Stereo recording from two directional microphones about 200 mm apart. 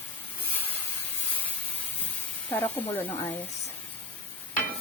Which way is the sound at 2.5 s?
10° left (ahead or behind).